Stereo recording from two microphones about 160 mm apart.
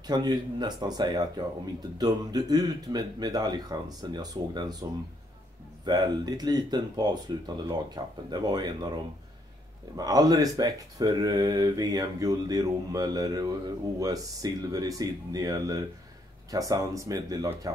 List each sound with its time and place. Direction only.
0.0 s speech: 25° right (ahead or behind)
5.9 s speech: 25° right (ahead or behind)